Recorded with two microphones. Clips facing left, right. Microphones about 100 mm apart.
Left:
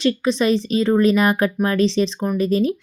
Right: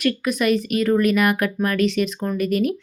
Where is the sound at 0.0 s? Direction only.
25° left (ahead or behind).